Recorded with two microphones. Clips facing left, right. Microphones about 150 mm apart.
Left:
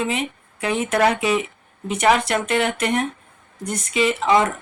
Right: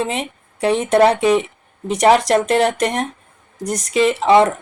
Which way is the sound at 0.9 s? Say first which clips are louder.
Right 6 dB; 30° right (ahead or behind).